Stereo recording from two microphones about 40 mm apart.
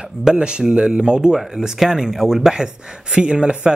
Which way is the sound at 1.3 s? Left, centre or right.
Centre.